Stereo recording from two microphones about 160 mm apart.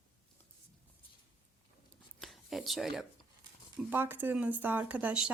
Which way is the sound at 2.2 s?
Centre (ahead or behind).